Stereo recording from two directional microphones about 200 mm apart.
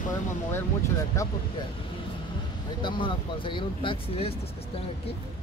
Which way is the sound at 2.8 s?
25° left (ahead or behind).